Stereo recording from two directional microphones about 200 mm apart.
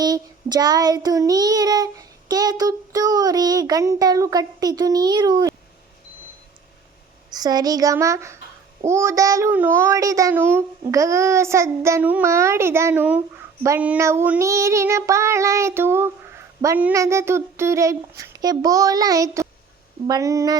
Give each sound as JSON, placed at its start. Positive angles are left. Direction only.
{"t": 0.0, "sound": "child singing", "side_deg": -20}
{"t": 7.3, "sound": "a child's voice", "side_deg": -20}